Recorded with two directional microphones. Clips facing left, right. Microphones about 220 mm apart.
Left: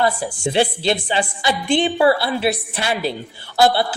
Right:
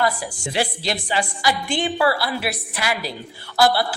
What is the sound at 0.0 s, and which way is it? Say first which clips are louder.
A woman's voice: left 3 dB; 25° left (ahead or behind).